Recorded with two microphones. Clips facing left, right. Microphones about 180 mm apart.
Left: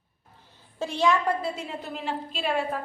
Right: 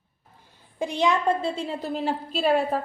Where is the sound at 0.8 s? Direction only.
15° right (ahead or behind); by 2.8 s 40° right (ahead or behind).